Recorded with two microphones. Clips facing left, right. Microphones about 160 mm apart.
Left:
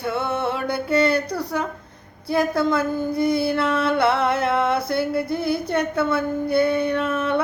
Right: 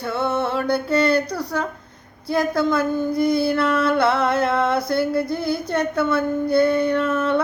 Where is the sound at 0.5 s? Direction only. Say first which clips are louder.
Right 2 dB; 25° left (ahead or behind).